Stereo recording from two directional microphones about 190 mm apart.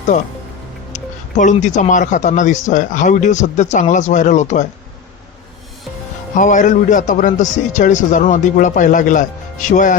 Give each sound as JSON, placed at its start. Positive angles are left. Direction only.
{"t": 0.9, "sound": "speech", "side_deg": 40}
{"t": 6.3, "sound": "speech", "side_deg": 40}